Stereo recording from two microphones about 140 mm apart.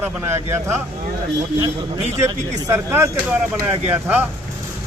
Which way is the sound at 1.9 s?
55° right (ahead or behind).